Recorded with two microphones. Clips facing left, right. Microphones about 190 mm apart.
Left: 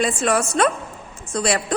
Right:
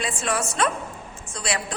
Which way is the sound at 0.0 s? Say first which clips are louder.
Left 7 dB; 45° left (ahead or behind).